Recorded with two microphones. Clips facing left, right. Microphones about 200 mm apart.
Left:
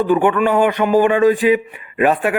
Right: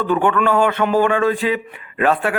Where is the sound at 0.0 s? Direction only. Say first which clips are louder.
Left 3 dB; 15° left (ahead or behind).